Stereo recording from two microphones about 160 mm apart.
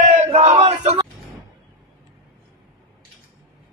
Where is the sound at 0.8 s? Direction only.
30° right (ahead or behind).